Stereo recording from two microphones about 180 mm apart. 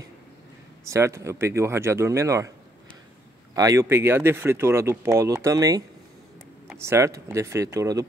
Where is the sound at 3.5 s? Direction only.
20° right (ahead or behind).